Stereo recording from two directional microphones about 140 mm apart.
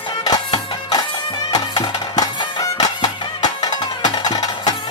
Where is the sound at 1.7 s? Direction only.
30° left (ahead or behind).